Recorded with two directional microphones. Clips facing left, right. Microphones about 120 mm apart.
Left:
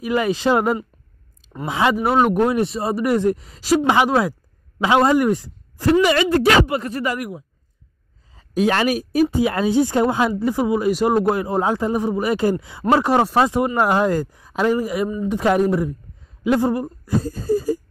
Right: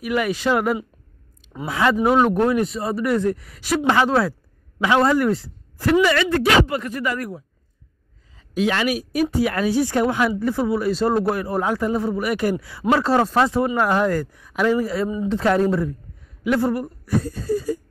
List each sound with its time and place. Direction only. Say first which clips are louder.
0.0 s a man's voice: left 2 dB; 25° left (ahead or behind)
2.0 s speech: right 1 dB; 10° left (ahead or behind)
2.5 s a man's voice: left 1 dB; 30° left (ahead or behind)
3.8 s a man's voice: right 2 dB; 15° left (ahead or behind); by 7.2 s 30° left (ahead or behind)
7.2 s speech: left 1 dB; 15° left (ahead or behind)
8.4 s a woman's voice: left 3 dB; 40° left (ahead or behind)
9.4 s a man's voice: left 2 dB; 25° left (ahead or behind)
17.2 s a sound: left 3 dB; 40° left (ahead or behind)